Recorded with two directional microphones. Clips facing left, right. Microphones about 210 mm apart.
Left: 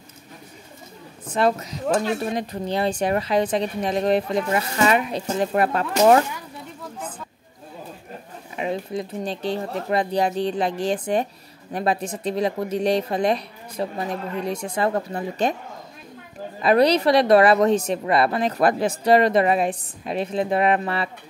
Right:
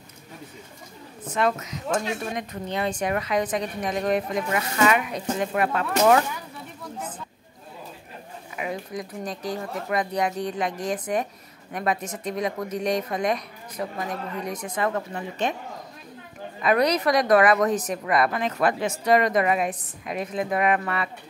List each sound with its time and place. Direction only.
1.2 s speech: 30° left (ahead or behind)
8.5 s a woman's voice: 30° left (ahead or behind)
16.6 s a woman's voice: 30° left (ahead or behind)